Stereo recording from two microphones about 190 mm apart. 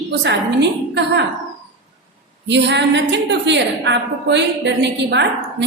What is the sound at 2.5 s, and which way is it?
A woman's voice, 65° right (ahead or behind).